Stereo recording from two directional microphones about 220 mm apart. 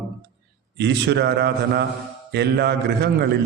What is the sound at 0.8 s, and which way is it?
A man's voice, 50° right (ahead or behind).